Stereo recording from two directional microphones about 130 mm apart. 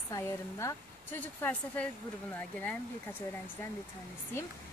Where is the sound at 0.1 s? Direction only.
25° left (ahead or behind).